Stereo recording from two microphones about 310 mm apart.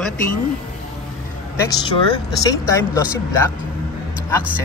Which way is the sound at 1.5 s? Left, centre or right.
Centre.